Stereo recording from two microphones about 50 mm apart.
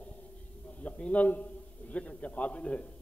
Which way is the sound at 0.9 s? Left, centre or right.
Left.